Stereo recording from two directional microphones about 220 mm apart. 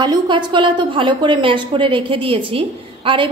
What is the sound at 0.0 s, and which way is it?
A woman's voice, 20° right (ahead or behind).